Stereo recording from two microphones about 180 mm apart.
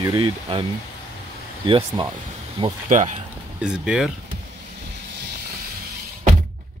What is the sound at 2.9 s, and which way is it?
Speech, 45° right (ahead or behind).